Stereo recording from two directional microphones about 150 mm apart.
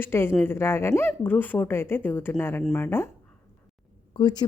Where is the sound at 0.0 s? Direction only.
15° left (ahead or behind).